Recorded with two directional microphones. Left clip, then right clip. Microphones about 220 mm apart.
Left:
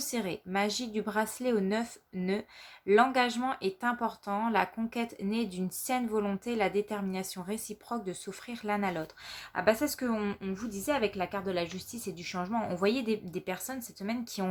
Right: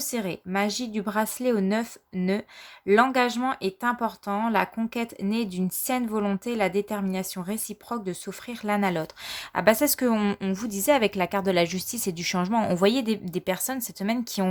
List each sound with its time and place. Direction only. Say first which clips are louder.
0.0 s speech: right 4 dB; 30° right (ahead or behind)